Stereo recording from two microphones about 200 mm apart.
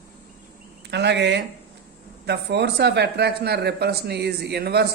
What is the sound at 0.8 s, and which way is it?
Speech, 55° right (ahead or behind).